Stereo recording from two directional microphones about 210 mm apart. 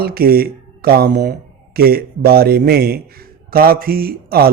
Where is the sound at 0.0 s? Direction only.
45° right (ahead or behind).